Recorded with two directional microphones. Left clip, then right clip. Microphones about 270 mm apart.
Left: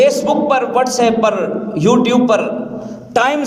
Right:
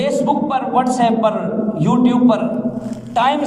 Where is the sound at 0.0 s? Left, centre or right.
Left.